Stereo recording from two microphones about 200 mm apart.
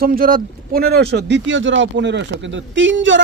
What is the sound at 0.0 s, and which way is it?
Speech, 45° right (ahead or behind).